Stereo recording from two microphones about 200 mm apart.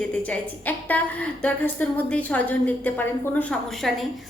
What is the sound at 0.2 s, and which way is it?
A woman's voice, 10° left (ahead or behind).